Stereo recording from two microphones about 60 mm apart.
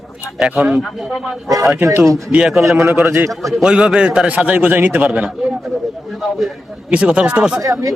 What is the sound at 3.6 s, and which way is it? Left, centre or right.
A man's voice, centre.